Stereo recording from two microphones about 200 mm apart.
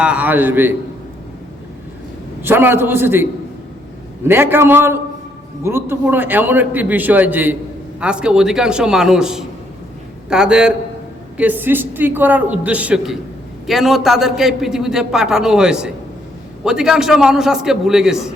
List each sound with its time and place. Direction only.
0.0 s a man's voice: 5° right (ahead or behind)
2.4 s a man's voice: 10° right (ahead or behind)
4.3 s a man's voice: 10° right (ahead or behind)